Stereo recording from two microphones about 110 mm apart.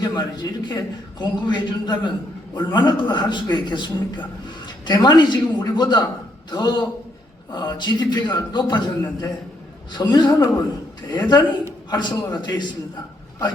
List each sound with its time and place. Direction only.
0.0 s a man's voice: 40° left (ahead or behind)